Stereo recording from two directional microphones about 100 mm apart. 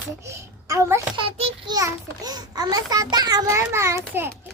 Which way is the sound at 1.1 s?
50° right (ahead or behind).